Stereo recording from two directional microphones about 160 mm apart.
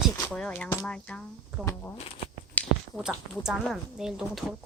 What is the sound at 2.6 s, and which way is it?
Finger snapping, 10° left (ahead or behind).